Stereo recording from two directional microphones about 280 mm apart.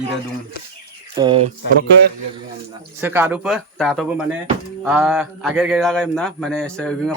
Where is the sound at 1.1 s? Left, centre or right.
Centre.